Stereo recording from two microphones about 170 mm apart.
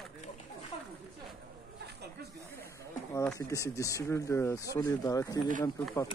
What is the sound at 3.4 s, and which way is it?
Speech, 20° left (ahead or behind).